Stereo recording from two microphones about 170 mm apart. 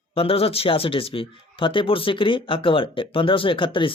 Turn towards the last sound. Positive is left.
turn(degrees=30)  # may be behind; listen again after turning